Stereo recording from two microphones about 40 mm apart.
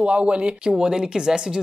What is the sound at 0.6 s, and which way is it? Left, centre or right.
Speech, centre.